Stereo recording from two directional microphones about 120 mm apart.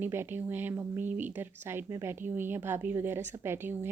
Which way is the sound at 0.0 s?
20° right (ahead or behind).